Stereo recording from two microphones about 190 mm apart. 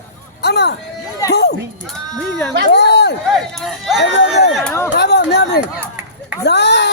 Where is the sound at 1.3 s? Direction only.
60° left (ahead or behind).